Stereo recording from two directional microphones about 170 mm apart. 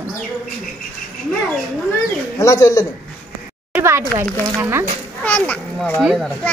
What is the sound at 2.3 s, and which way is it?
Speech, 20° left (ahead or behind).